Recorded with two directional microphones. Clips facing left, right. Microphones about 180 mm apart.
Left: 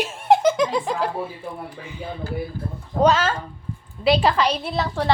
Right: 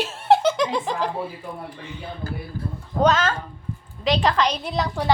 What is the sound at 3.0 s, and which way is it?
A woman's voice, 10° left (ahead or behind).